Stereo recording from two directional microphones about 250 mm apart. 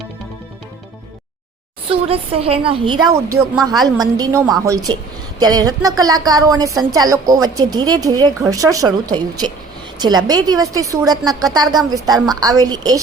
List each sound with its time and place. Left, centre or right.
1.9 s a woman's voice: right
3.3 s a woman's voice: centre